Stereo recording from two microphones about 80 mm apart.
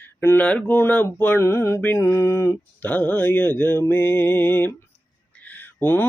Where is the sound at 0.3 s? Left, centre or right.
Centre; by 1.8 s left.